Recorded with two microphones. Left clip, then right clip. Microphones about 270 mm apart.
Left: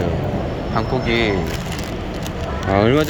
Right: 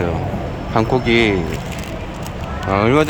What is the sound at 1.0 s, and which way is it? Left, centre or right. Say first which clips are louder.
Speech: right 2 dB; centre.